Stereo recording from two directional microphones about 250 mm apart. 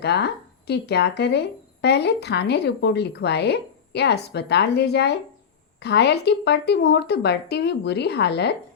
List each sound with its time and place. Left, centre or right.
0.0 s speech: left